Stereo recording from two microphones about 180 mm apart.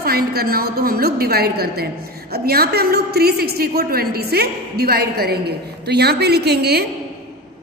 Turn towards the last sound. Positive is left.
turn(degrees=-60)  # may be behind; listen again after turning